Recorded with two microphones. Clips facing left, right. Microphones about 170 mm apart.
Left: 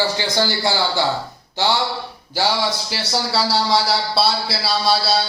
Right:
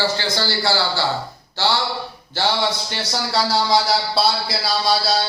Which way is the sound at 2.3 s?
10° left (ahead or behind).